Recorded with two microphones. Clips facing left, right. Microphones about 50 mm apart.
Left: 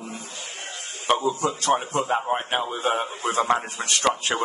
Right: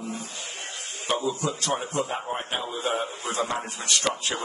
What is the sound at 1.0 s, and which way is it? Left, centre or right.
A man's voice, left.